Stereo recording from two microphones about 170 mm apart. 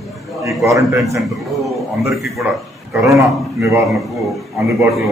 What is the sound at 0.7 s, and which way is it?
Speech, 20° right (ahead or behind).